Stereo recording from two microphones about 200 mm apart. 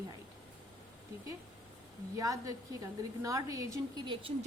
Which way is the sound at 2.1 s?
15° right (ahead or behind).